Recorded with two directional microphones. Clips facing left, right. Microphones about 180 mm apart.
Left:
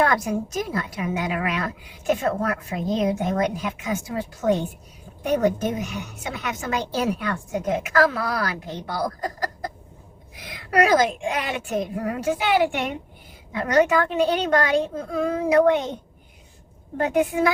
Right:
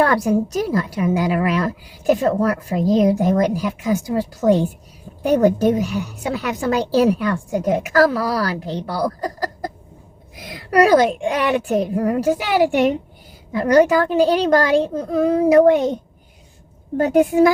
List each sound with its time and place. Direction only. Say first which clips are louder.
0.0 s a woman's voice: right 5 dB; 35° right (ahead or behind)
17.0 s a woman's voice: right 7 dB; 40° right (ahead or behind)